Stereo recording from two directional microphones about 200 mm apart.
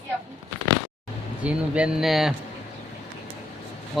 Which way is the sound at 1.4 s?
5° right (ahead or behind).